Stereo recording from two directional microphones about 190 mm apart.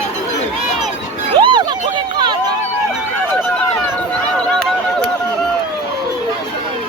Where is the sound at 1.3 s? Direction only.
25° right (ahead or behind).